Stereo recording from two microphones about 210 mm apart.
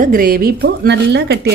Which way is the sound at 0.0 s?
45° right (ahead or behind).